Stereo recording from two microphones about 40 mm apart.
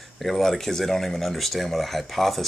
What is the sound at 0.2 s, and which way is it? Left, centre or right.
Speech, centre.